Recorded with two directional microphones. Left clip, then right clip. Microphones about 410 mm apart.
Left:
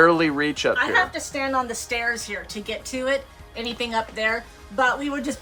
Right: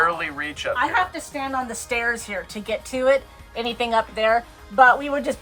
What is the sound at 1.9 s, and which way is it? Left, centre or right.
A woman's voice, centre.